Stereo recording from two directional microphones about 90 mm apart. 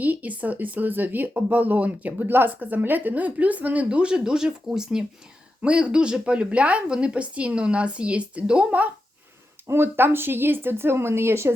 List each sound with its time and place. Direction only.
0.0 s speech: 15° right (ahead or behind)
9.6 s speech: 25° right (ahead or behind)